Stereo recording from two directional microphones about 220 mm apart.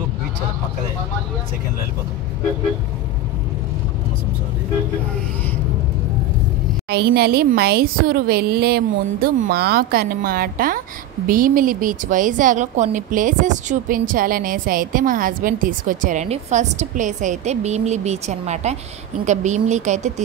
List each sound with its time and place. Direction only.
6.9 s a woman's voice: 45° right (ahead or behind)